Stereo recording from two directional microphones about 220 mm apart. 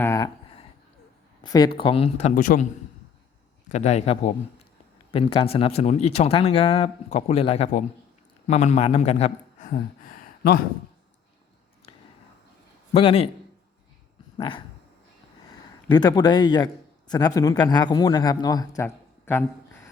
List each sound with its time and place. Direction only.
0.0 s a sound: 15° left (ahead or behind)
1.8 s speech: 25° left (ahead or behind)
3.7 s a man's voice: 30° left (ahead or behind)
12.9 s speech: 25° left (ahead or behind)
14.3 s a sound: 25° left (ahead or behind)
15.9 s a man's voice: 20° left (ahead or behind)